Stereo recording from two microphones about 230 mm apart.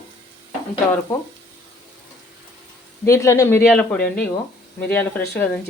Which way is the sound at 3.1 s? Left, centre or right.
Centre.